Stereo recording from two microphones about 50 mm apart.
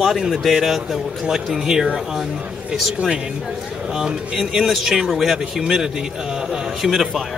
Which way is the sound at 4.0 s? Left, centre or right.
Centre.